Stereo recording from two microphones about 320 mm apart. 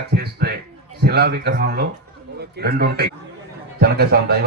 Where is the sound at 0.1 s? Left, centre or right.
Right.